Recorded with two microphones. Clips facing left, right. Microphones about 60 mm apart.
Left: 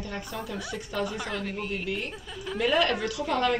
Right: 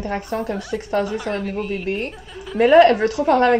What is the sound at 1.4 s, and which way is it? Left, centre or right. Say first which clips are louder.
Speech: right 8 dB; centre.